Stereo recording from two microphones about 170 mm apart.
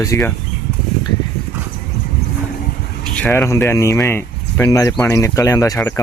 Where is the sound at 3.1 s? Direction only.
10° left (ahead or behind).